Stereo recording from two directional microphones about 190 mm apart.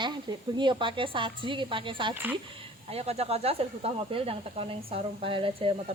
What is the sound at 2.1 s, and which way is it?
Speech, 10° right (ahead or behind).